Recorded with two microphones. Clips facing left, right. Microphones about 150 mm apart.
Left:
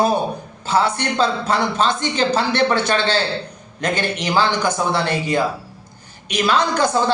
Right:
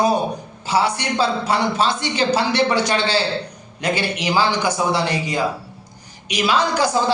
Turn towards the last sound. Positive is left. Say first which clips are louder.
# left 1 dB
turn(degrees=-10)  # may be behind; listen again after turning